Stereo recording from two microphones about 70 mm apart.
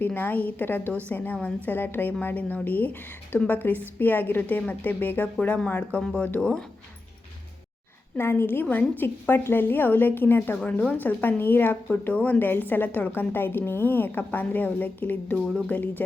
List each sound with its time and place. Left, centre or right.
0.0 s a woman's voice: left
8.2 s a woman's voice: left
10.6 s a woman's voice: centre